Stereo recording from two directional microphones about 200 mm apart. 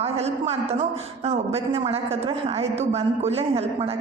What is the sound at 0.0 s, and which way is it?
A woman's voice, 30° right (ahead or behind).